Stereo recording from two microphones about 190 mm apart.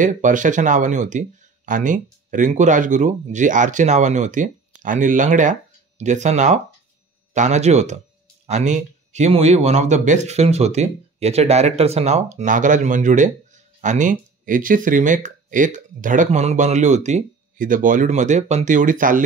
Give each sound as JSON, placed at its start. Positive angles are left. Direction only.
{"t": 0.0, "sound": "speech", "side_deg": -40}